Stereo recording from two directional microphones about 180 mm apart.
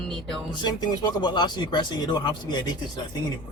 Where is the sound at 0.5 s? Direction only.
25° left (ahead or behind).